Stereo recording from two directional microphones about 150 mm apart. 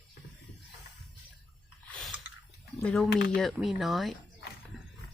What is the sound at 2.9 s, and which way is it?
Speech, centre (ahead or behind).